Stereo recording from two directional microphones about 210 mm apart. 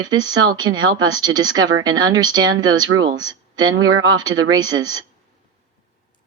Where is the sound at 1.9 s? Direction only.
70° right (ahead or behind).